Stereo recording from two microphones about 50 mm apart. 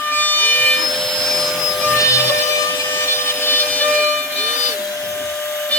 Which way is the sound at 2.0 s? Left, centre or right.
Left.